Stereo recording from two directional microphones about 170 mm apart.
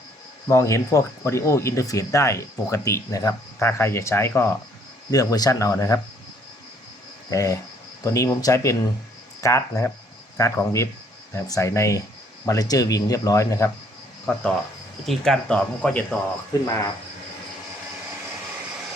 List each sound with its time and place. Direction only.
0.4 s speech: 20° left (ahead or behind)
7.3 s speech: 20° left (ahead or behind)
16.5 s speech: 20° left (ahead or behind)